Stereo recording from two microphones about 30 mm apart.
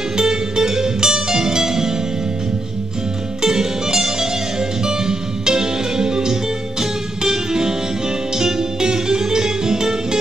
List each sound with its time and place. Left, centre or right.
0.2 s music: right
3.4 s music: right